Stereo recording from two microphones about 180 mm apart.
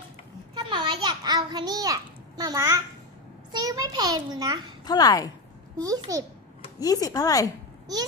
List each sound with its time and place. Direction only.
0.6 s a sound: 25° right (ahead or behind)
3.5 s a child's voice: 20° right (ahead or behind)
4.8 s speech: 20° left (ahead or behind)
5.8 s a child's voice: 20° right (ahead or behind)
6.8 s speech: 20° left (ahead or behind)